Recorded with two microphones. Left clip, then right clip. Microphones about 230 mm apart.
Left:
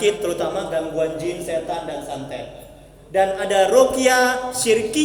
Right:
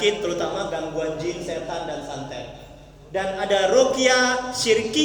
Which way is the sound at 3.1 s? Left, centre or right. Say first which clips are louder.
Left 4 dB; left.